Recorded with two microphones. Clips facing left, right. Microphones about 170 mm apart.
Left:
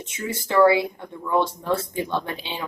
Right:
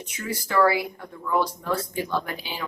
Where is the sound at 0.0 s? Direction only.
25° left (ahead or behind).